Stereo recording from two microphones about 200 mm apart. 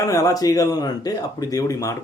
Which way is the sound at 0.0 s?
15° left (ahead or behind).